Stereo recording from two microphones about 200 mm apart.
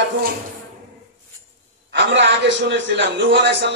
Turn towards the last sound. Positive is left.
turn(degrees=-60)  # may be behind; listen again after turning